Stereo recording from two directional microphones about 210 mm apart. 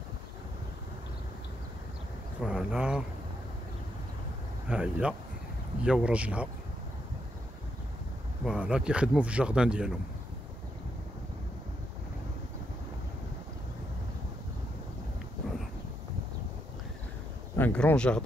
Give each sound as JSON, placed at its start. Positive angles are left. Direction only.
{"t": 2.4, "sound": "speech", "side_deg": -5}
{"t": 4.6, "sound": "speech", "side_deg": -5}
{"t": 8.5, "sound": "speech", "side_deg": -5}
{"t": 17.6, "sound": "speech", "side_deg": 10}